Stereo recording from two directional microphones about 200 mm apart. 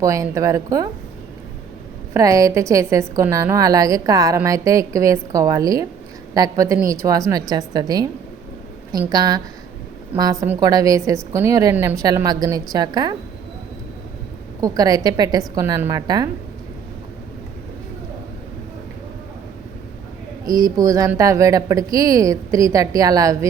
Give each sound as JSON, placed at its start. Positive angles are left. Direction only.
{"t": 0.0, "sound": "a woman's voice", "side_deg": -15}
{"t": 2.1, "sound": "a woman's voice", "side_deg": -15}
{"t": 10.4, "sound": "a woman's voice", "side_deg": -15}
{"t": 14.6, "sound": "a woman's voice", "side_deg": -20}
{"t": 20.4, "sound": "a woman's voice", "side_deg": -20}